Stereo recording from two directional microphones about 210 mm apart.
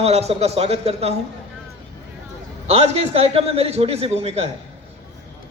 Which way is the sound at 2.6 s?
30° right (ahead or behind).